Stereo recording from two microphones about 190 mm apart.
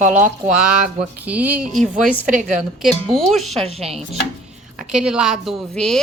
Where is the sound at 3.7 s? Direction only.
30° right (ahead or behind).